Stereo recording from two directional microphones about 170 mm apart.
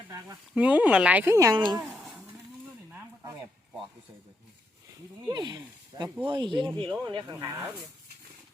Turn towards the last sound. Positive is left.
turn(degrees=-20)  # may be behind; listen again after turning